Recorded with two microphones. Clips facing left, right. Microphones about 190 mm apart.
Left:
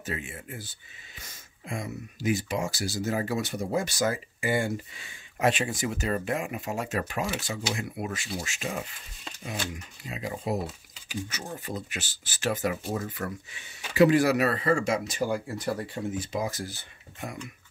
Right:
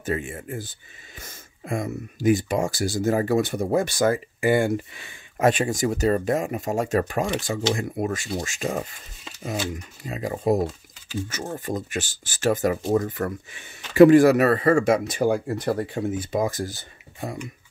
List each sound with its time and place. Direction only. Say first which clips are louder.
0.0 s speech: right 8 dB; 50° right (ahead or behind)
10.0 s speech: right 8 dB; 45° right (ahead or behind)
11.6 s speech: right 7 dB; 45° right (ahead or behind)